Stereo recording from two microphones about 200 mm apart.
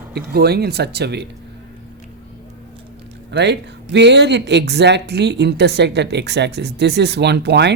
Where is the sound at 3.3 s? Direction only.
60° right (ahead or behind).